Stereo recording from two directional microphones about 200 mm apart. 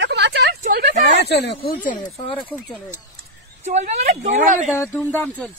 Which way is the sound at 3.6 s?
35° right (ahead or behind).